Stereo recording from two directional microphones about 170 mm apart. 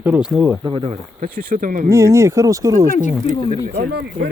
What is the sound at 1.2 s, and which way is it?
Speech, 55° right (ahead or behind).